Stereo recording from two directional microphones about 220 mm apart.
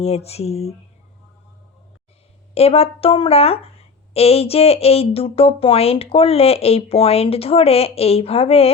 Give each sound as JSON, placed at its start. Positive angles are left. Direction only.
{"t": 0.0, "sound": "a woman's voice", "side_deg": 30}
{"t": 2.6, "sound": "a woman's voice", "side_deg": 25}